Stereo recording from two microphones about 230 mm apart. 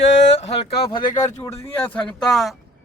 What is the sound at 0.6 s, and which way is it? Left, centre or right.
Speech, left.